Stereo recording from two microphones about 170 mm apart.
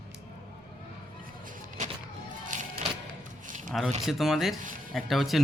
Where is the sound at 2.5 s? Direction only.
50° right (ahead or behind).